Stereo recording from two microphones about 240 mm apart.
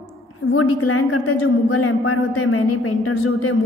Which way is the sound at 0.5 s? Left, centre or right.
Left.